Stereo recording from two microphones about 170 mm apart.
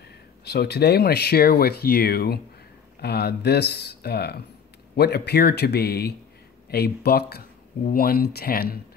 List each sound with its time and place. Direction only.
0.5 s speech: 70° left (ahead or behind)